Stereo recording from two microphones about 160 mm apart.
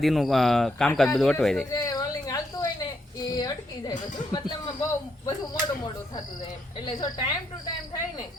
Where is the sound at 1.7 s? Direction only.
20° left (ahead or behind).